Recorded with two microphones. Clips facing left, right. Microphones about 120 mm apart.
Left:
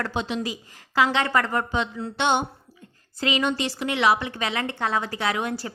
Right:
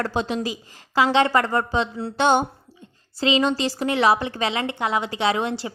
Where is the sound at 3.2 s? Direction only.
30° right (ahead or behind).